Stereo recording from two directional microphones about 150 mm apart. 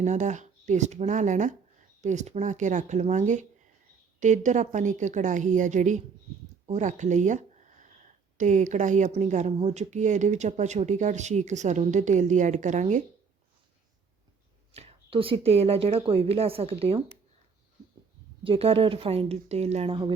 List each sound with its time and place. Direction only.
0.0 s a woman's voice: 55° right (ahead or behind)
14.7 s speech: 40° right (ahead or behind)
18.4 s speech: 40° right (ahead or behind)